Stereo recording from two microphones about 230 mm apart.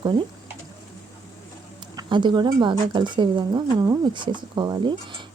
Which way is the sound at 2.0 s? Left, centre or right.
Centre.